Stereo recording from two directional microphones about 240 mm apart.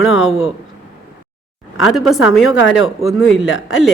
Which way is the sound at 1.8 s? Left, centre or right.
Centre.